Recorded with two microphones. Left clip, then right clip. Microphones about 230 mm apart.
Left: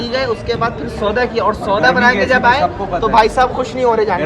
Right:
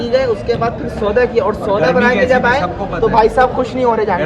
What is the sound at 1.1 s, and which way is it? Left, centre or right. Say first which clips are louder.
Speech: right 2 dB; left.